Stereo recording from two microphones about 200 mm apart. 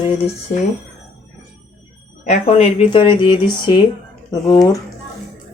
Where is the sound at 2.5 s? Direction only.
25° left (ahead or behind).